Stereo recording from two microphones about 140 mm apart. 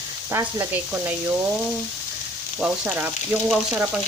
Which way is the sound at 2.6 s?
10° right (ahead or behind).